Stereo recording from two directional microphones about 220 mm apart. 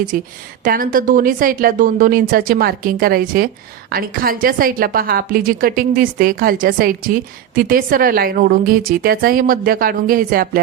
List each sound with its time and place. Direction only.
0.1 s a woman's voice: 40° right (ahead or behind)